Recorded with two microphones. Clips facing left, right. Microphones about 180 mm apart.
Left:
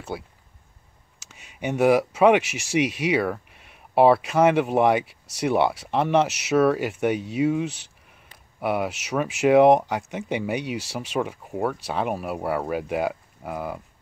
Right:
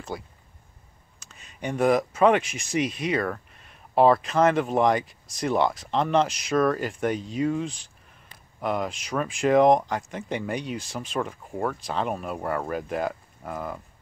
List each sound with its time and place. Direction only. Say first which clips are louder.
0.1 s speech: left 3 dB; 5° left (ahead or behind)
1.3 s speech: left 3 dB; 10° left (ahead or behind)
7.6 s speech: left 3 dB; 70° left (ahead or behind)
8.5 s speech: left 2 dB; 10° left (ahead or behind)